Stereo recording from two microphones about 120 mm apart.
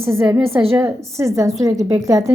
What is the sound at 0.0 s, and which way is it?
A woman's voice, 20° right (ahead or behind).